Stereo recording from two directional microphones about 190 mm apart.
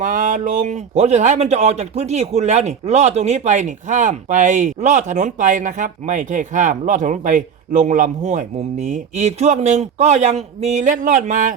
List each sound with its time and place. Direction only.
0.0 s speech: 45° right (ahead or behind)